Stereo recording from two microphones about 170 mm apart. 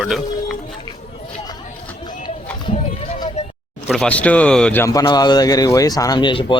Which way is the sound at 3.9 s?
5° left (ahead or behind).